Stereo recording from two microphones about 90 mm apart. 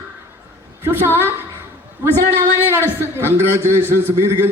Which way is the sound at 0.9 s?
25° right (ahead or behind).